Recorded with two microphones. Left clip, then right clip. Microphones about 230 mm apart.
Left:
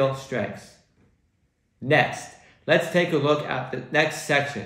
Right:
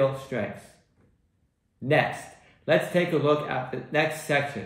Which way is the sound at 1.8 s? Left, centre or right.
Centre.